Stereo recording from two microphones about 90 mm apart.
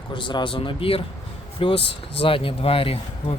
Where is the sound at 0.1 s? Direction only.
65° left (ahead or behind).